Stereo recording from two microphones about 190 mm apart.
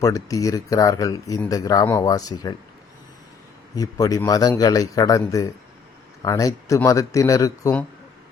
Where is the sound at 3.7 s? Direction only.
20° left (ahead or behind).